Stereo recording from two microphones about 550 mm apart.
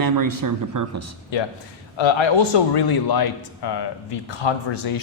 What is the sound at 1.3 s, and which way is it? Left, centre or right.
A man's voice, left.